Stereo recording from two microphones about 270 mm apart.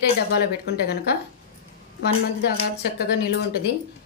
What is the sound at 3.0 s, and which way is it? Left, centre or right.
Speech, left.